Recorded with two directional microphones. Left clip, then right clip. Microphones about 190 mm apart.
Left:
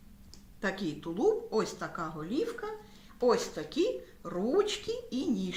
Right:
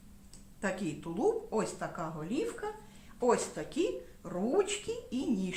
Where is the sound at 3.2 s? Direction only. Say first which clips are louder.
Left 2 dB; 20° right (ahead or behind).